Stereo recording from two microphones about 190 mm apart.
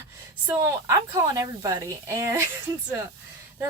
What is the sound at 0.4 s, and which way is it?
Speech, 15° right (ahead or behind).